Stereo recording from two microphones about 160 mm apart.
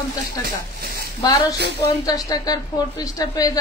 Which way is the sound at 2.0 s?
25° left (ahead or behind).